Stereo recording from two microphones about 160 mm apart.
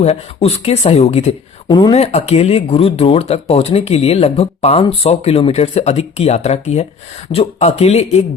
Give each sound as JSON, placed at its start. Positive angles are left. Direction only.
{"t": 0.0, "sound": "speech", "side_deg": 40}
{"t": 1.6, "sound": "speech", "side_deg": 25}
{"t": 1.9, "sound": "speech", "side_deg": 40}